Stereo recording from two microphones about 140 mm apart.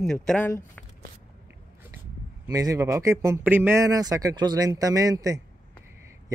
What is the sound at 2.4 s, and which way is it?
Speech, 25° right (ahead or behind).